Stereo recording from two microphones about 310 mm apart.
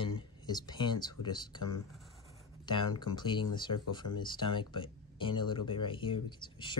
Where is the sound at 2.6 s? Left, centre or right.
Centre.